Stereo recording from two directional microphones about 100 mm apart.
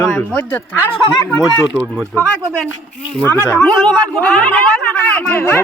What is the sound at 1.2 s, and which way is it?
Speech, 35° left (ahead or behind).